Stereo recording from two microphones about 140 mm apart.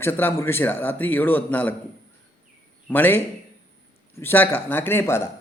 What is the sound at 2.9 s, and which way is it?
Speech, 15° left (ahead or behind).